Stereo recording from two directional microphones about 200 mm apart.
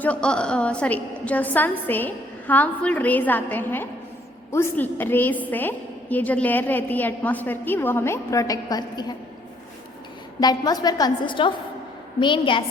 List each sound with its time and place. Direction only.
0.0 s a woman's voice: 5° left (ahead or behind)
10.4 s a woman's voice: 20° left (ahead or behind)